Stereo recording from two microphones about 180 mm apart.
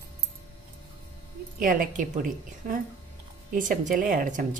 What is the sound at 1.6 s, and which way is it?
Speech, 50° right (ahead or behind).